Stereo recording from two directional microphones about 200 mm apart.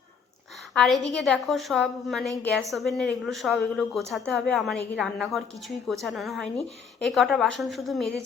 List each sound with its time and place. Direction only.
0.7 s a woman's voice: centre (ahead or behind)